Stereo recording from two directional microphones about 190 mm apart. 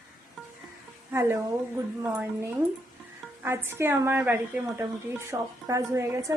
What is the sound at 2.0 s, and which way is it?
A woman's voice, 5° right (ahead or behind).